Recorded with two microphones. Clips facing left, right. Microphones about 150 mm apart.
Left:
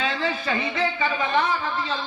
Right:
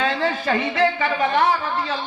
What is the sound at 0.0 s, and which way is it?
A man's voice, 45° right (ahead or behind).